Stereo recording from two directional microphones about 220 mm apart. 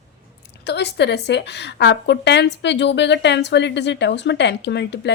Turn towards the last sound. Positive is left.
turn(degrees=50)  # may be behind; listen again after turning